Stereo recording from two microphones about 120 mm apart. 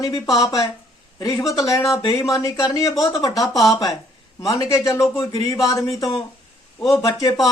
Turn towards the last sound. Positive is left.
turn(degrees=35)  # may be behind; listen again after turning